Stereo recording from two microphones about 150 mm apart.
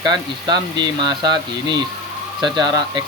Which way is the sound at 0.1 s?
30° right (ahead or behind).